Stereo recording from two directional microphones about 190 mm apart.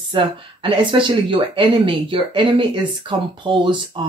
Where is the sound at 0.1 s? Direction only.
25° right (ahead or behind).